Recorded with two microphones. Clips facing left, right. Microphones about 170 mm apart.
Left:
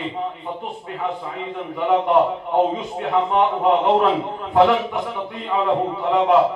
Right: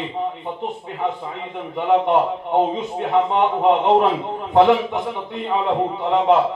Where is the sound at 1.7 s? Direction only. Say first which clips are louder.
Even; 20° right (ahead or behind).